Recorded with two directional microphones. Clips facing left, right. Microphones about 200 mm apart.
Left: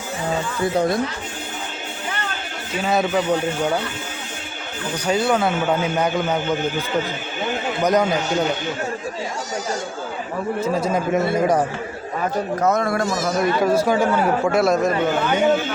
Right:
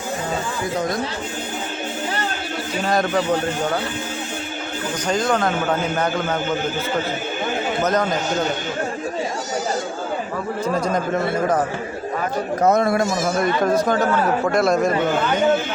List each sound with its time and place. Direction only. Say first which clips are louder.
2.8 s speech: left 1 dB; 5° left (ahead or behind)
5.0 s a man's voice: left 1 dB; 10° left (ahead or behind)
7.8 s a man's voice: left 3 dB; 10° left (ahead or behind)
10.8 s a man's voice: left 1 dB; 5° left (ahead or behind)
12.6 s a man's voice: right 4 dB; 30° right (ahead or behind)
13.4 s a man's voice: left 2 dB; 5° left (ahead or behind)